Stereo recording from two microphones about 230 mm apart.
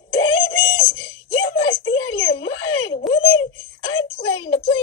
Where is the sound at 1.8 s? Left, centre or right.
Left.